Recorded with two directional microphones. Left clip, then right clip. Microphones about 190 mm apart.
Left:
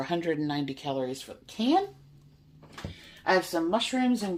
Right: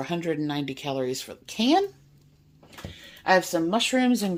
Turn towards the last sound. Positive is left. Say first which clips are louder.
# right 4 dB
turn(degrees=-70)  # may be behind; listen again after turning